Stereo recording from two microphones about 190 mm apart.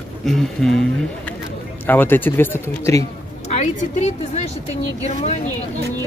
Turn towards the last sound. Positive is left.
turn(degrees=35)  # may be behind; listen again after turning